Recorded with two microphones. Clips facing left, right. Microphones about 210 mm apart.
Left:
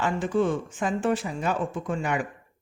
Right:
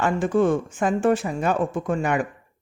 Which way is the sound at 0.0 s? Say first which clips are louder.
Right 4 dB; 50° right (ahead or behind).